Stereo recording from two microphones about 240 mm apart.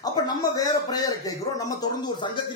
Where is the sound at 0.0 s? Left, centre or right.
Centre.